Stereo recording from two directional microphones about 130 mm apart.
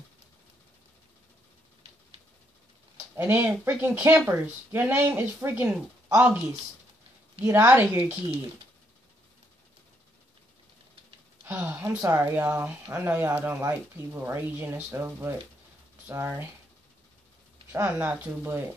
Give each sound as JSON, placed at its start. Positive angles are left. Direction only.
{"t": 3.2, "sound": "speech", "side_deg": -15}
{"t": 7.4, "sound": "speech", "side_deg": -20}
{"t": 11.4, "sound": "speech", "side_deg": -15}
{"t": 17.7, "sound": "speech", "side_deg": -20}